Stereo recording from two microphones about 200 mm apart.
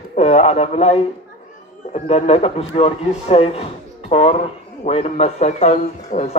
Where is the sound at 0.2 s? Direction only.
35° left (ahead or behind).